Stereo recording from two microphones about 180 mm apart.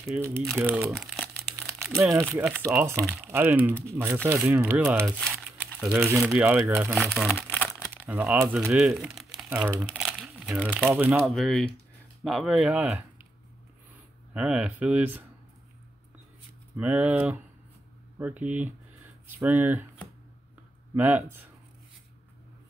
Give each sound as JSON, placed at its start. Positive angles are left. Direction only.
{"t": 0.1, "sound": "speech", "side_deg": -10}
{"t": 0.9, "sound": "crumpling", "side_deg": 0}
{"t": 2.0, "sound": "speech", "side_deg": -15}
{"t": 5.6, "sound": "crumpling", "side_deg": -10}
{"t": 6.1, "sound": "speech", "side_deg": -5}
{"t": 7.0, "sound": "speech", "side_deg": 5}
{"t": 7.6, "sound": "crumpling", "side_deg": -5}
{"t": 8.0, "sound": "speech", "side_deg": -10}
{"t": 14.3, "sound": "speech", "side_deg": -5}
{"t": 16.7, "sound": "speech", "side_deg": -10}
{"t": 20.9, "sound": "speech", "side_deg": -10}